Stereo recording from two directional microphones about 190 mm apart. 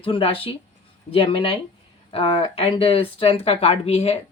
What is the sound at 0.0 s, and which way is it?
Speech, 30° left (ahead or behind).